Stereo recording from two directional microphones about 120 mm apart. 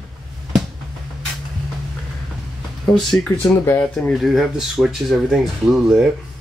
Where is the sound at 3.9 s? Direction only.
Centre (ahead or behind).